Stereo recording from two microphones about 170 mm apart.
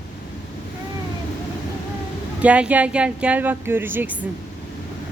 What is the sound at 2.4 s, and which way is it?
Speech, 10° right (ahead or behind).